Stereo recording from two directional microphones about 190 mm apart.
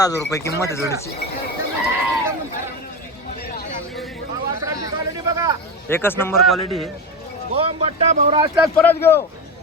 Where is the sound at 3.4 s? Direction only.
55° left (ahead or behind).